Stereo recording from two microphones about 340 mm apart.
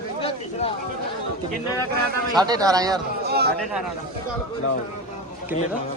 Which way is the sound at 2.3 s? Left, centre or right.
Centre.